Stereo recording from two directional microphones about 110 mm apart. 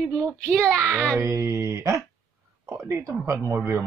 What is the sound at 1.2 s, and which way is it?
Speech, 30° right (ahead or behind).